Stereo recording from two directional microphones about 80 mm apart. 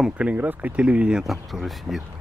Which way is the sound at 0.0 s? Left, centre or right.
Centre.